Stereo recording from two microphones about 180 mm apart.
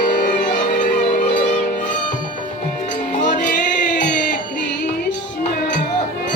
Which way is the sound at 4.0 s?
50° left (ahead or behind).